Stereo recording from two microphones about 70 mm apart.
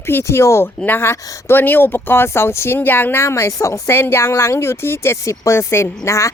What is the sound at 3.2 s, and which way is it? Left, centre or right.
Speech, left.